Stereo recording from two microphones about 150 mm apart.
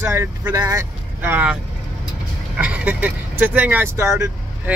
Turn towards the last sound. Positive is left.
turn(degrees=-20)  # may be behind; listen again after turning